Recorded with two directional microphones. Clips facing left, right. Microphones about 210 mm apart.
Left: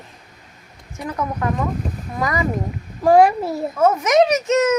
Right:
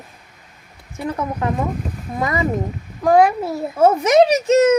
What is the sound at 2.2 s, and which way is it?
Speech, 25° right (ahead or behind).